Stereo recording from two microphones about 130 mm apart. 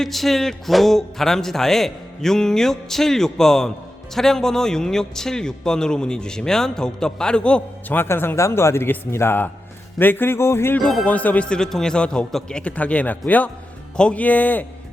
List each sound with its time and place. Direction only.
0.0 s a man's voice: centre (ahead or behind); by 10.8 s 20° left (ahead or behind)
10.8 s speech: 10° left (ahead or behind)